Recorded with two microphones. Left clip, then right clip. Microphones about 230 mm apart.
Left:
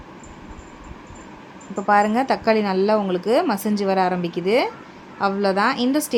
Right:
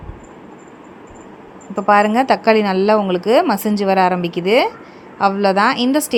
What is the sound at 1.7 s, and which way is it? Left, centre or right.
A woman's voice, right.